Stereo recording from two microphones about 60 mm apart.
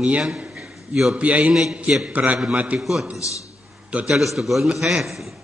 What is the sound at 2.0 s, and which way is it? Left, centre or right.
Speech, right.